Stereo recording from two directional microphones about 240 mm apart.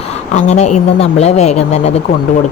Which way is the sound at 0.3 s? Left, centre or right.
Left.